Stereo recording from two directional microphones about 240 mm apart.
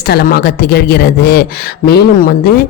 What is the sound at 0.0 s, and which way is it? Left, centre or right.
Speech, left.